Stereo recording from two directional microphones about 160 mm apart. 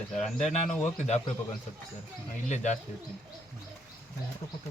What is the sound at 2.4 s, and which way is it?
Speech, 45° left (ahead or behind).